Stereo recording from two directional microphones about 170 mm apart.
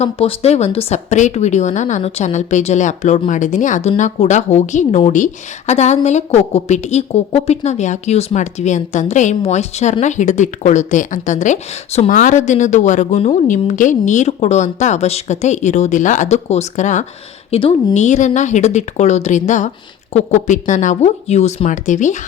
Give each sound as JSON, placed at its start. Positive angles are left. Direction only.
{"t": 0.0, "sound": "a woman's voice", "side_deg": 35}
{"t": 17.5, "sound": "a woman's voice", "side_deg": 30}